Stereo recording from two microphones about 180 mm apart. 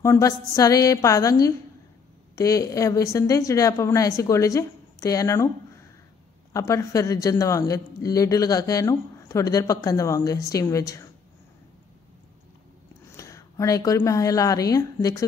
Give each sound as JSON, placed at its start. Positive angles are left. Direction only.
{"t": 0.0, "sound": "a woman's voice", "side_deg": 15}
{"t": 6.5, "sound": "a woman's voice", "side_deg": 15}
{"t": 13.1, "sound": "a woman's voice", "side_deg": 15}